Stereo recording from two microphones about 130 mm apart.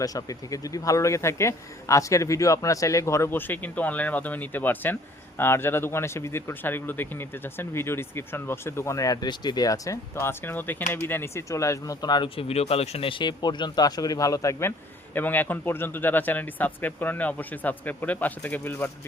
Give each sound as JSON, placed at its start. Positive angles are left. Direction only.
{"t": 0.0, "sound": "speech", "side_deg": 30}
{"t": 15.1, "sound": "speech", "side_deg": 15}